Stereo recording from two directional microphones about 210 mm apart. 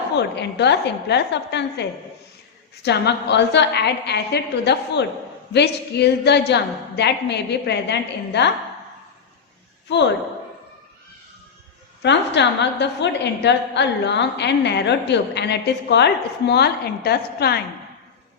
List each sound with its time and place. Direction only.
0.2 s a woman's voice: 55° left (ahead or behind)
9.9 s a woman's voice: 55° left (ahead or behind)
12.0 s a woman's voice: 55° left (ahead or behind)